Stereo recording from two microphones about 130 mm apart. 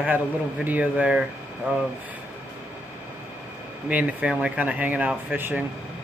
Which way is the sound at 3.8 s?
10° right (ahead or behind).